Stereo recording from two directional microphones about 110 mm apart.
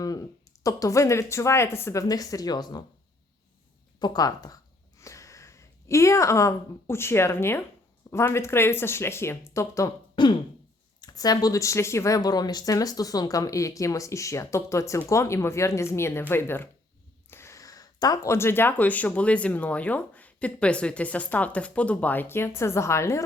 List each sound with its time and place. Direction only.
0.0 s speech: 35° left (ahead or behind)
4.0 s speech: 35° left (ahead or behind)
10.2 s a sound: 45° left (ahead or behind)
11.0 s speech: 35° left (ahead or behind)